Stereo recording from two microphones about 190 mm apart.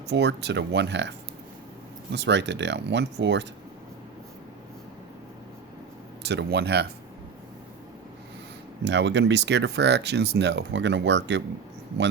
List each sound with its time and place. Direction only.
0.1 s speech: 65° right (ahead or behind)
2.1 s speech: 65° right (ahead or behind)
6.2 s speech: 60° right (ahead or behind)
8.8 s speech: 70° right (ahead or behind)